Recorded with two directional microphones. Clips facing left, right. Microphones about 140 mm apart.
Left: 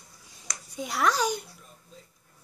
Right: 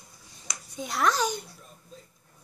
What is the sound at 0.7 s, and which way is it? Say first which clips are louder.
Speech: even; 10° left (ahead or behind).